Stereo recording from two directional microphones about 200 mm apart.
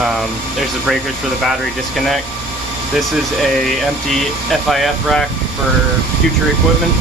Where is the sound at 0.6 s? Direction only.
Centre (ahead or behind).